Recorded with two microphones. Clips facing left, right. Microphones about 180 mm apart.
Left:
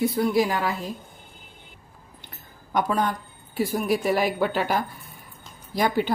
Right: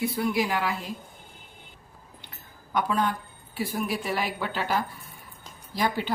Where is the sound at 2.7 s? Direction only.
45° left (ahead or behind).